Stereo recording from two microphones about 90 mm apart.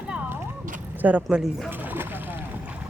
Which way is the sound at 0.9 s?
15° right (ahead or behind).